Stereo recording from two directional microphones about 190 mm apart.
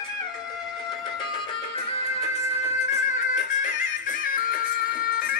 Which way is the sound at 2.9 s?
40° left (ahead or behind).